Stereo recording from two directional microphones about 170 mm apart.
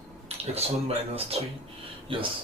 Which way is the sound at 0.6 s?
35° right (ahead or behind).